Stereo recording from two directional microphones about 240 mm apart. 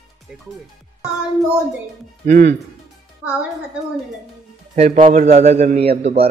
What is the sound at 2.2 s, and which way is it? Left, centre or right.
Speech, right.